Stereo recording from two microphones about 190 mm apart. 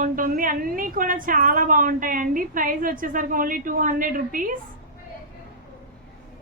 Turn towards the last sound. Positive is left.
turn(degrees=-45)  # may be behind; listen again after turning